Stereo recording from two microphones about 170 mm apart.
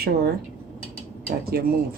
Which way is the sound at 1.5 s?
65° right (ahead or behind).